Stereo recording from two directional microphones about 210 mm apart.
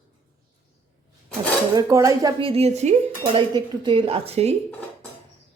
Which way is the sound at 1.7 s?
15° right (ahead or behind).